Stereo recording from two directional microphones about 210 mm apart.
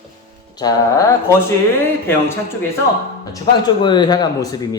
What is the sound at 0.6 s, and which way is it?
Speech, 15° left (ahead or behind).